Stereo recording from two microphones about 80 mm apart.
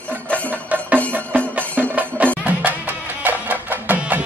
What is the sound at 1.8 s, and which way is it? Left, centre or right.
Music, centre.